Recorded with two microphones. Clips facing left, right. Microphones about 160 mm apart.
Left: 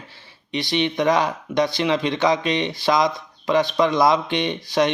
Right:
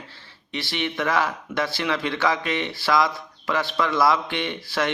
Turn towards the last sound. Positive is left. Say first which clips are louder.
# left 5 dB
turn(degrees=20)  # may be behind; listen again after turning